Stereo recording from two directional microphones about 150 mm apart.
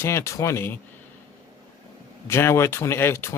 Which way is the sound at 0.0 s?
20° left (ahead or behind).